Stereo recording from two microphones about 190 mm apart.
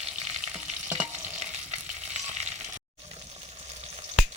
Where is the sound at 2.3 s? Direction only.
35° right (ahead or behind).